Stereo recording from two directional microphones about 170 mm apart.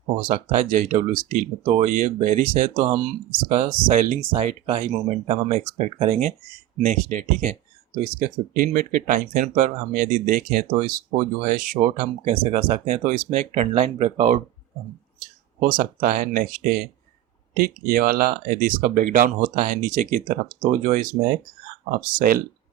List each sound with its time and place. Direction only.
0.2 s speech: 55° right (ahead or behind)
4.2 s speech: 35° right (ahead or behind); by 12.4 s 55° right (ahead or behind)
12.4 s speech: 35° right (ahead or behind)
15.6 s speech: 55° right (ahead or behind)